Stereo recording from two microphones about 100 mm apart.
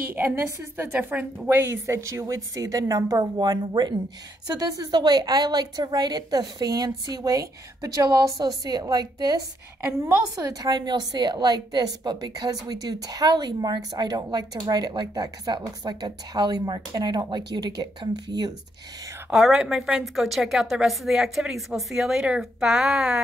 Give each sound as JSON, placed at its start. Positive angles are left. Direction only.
{"t": 0.1, "sound": "a woman's voice", "side_deg": -20}
{"t": 0.9, "sound": "a woman's voice", "side_deg": -10}
{"t": 1.5, "sound": "a woman's voice", "side_deg": -25}
{"t": 9.8, "sound": "a woman's voice", "side_deg": -25}
{"t": 19.3, "sound": "a woman's voice", "side_deg": -5}